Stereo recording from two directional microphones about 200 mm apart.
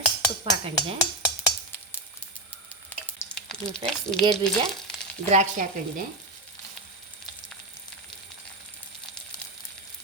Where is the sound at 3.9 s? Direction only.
5° left (ahead or behind).